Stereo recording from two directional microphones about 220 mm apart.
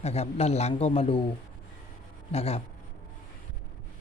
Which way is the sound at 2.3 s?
30° left (ahead or behind).